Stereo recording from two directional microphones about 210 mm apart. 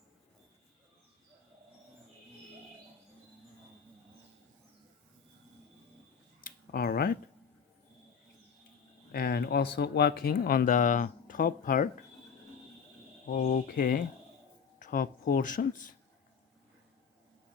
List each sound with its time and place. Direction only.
6.4 s a sound: 45° left (ahead or behind)
9.1 s speech: 50° left (ahead or behind)
13.3 s speech: 40° left (ahead or behind)